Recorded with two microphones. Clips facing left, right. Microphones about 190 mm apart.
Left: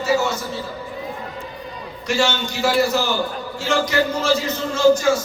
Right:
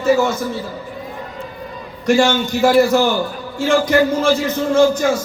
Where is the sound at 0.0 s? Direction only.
55° right (ahead or behind).